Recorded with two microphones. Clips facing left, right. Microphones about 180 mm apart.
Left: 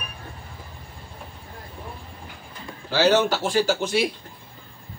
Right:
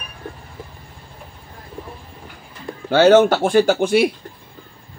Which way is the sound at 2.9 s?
50° right (ahead or behind).